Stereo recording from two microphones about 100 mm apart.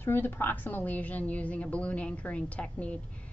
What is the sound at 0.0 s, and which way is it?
A woman's voice, 20° left (ahead or behind).